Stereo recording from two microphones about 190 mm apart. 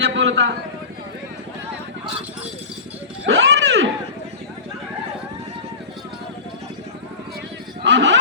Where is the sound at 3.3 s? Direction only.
75° right (ahead or behind).